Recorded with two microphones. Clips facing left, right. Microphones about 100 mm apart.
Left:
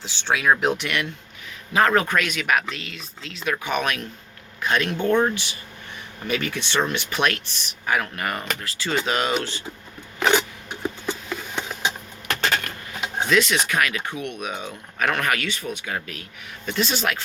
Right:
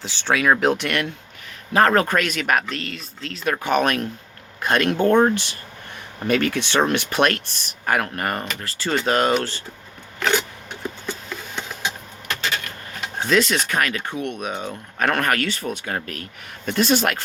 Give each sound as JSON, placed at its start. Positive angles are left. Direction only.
{"t": 0.3, "sound": "speech", "side_deg": -50}
{"t": 10.2, "sound": "a sound", "side_deg": 10}
{"t": 13.2, "sound": "speech", "side_deg": -35}